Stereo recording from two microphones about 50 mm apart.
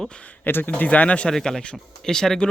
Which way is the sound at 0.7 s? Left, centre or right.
Left.